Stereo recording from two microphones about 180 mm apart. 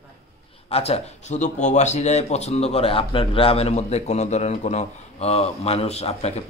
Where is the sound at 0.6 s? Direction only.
35° left (ahead or behind).